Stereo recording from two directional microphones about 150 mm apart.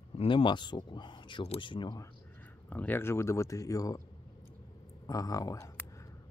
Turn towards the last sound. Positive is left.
turn(degrees=20)  # may be behind; listen again after turning